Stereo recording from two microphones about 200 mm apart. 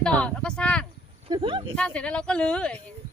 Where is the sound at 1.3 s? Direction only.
25° right (ahead or behind).